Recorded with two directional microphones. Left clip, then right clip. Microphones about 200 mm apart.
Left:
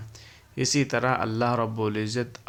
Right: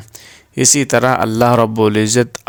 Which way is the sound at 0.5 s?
55° right (ahead or behind).